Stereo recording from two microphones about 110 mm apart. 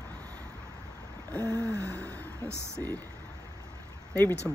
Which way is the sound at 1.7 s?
30° right (ahead or behind).